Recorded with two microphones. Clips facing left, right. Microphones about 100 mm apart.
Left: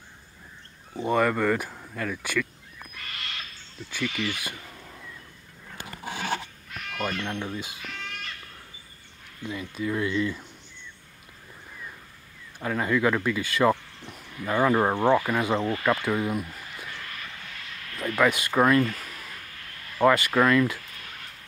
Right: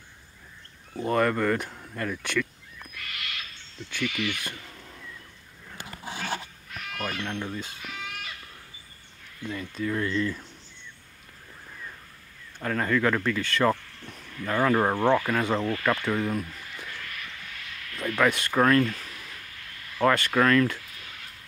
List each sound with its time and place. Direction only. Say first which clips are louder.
0.9 s speech: left 1 dB; 5° left (ahead or behind)
2.9 s owl: even; 30° left (ahead or behind)
4.4 s a sound: left 1 dB; 5° left (ahead or behind)
6.7 s speech: left 2 dB; centre (ahead or behind)
7.8 s goat: even; 5° right (ahead or behind)
9.4 s speech: even; 5° left (ahead or behind)
12.5 s speech: even; 10° left (ahead or behind)
18.1 s speech: left 1 dB; 5° left (ahead or behind)
20.0 s speech: left 2 dB; 10° left (ahead or behind)